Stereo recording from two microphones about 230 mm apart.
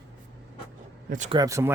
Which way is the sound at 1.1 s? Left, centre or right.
Right.